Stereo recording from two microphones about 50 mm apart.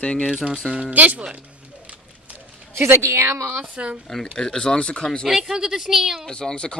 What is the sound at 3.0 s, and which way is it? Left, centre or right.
Speech, right.